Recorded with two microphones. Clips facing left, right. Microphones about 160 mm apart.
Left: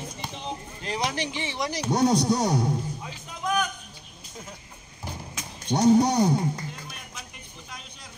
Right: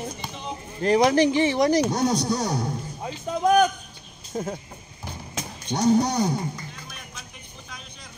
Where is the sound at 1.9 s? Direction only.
25° left (ahead or behind).